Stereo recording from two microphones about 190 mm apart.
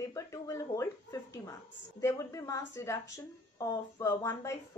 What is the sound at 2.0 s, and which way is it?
A woman's voice, 15° left (ahead or behind).